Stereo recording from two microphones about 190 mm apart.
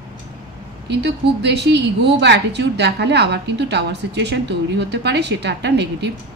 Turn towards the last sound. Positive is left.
turn(degrees=-65)  # may be behind; listen again after turning